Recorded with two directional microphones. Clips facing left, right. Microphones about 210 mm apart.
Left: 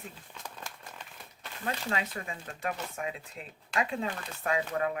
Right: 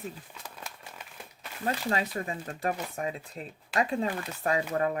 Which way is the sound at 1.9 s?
40° right (ahead or behind).